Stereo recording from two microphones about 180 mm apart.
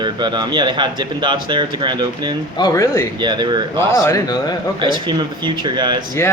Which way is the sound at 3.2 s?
25° right (ahead or behind).